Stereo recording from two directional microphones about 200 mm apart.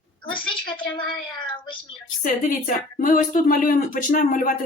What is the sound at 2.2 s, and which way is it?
Speech, 45° left (ahead or behind).